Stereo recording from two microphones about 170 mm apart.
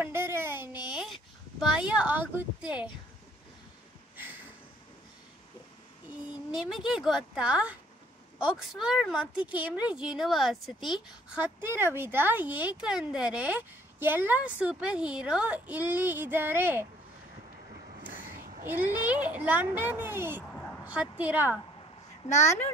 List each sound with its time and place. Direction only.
0.0 s a sound: 15° right (ahead or behind)
1.6 s speech: 5° right (ahead or behind)
6.0 s a woman's voice: 5° right (ahead or behind)
11.6 s speech: 15° right (ahead or behind)
18.0 s a sound: 10° right (ahead or behind)
19.2 s a woman's voice: 10° right (ahead or behind)
22.2 s speech: 40° left (ahead or behind)